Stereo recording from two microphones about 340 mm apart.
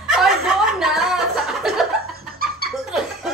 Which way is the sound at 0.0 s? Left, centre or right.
Centre.